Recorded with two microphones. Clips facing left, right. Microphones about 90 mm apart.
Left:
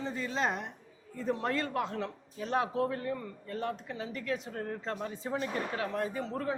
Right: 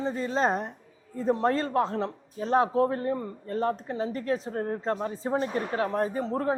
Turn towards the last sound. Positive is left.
turn(degrees=-35)  # may be behind; listen again after turning